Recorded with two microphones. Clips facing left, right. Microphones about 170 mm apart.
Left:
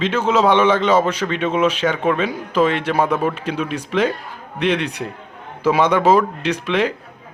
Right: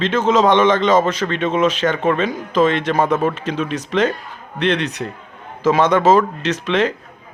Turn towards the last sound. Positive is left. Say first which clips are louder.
# right 1 dB
turn(degrees=10)  # may be behind; listen again after turning